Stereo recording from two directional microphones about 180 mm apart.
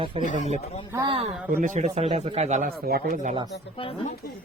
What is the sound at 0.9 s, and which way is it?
Speech, 25° right (ahead or behind).